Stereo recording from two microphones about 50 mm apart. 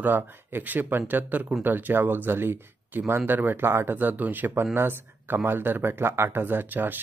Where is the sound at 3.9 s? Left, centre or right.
Right.